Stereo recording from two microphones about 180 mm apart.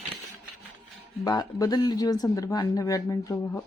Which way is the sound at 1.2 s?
20° left (ahead or behind).